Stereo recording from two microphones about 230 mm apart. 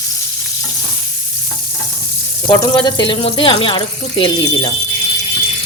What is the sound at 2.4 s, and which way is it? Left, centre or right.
Speech, centre.